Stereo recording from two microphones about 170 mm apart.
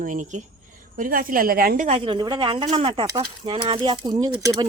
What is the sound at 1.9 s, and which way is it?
Speech, 30° right (ahead or behind).